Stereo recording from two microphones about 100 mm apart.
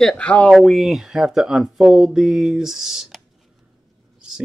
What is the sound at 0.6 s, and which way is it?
Speech, centre (ahead or behind).